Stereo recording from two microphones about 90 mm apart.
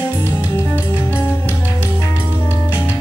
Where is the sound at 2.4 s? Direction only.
25° left (ahead or behind).